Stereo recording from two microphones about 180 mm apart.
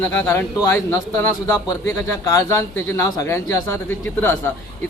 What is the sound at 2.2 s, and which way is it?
A man's voice, 15° left (ahead or behind).